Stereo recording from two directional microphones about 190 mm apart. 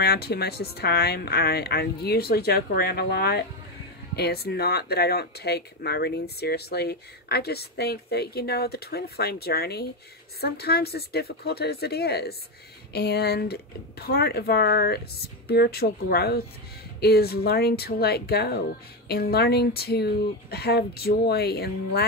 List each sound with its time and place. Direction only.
0.0 s speech: 55° left (ahead or behind)